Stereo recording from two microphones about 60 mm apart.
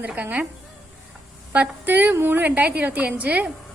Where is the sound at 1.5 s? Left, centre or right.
Right.